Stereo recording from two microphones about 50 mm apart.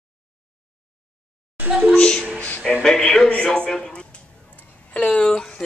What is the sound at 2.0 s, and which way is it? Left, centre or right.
Speech, centre.